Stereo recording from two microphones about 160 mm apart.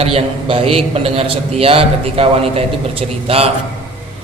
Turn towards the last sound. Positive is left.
turn(degrees=-35)  # may be behind; listen again after turning